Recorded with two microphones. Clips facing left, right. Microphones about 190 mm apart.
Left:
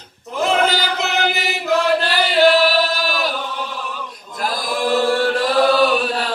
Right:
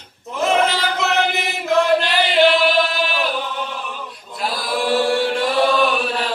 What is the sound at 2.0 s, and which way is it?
Chant, 40° left (ahead or behind).